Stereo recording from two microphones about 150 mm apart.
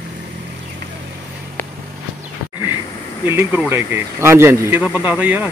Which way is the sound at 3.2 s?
15° right (ahead or behind).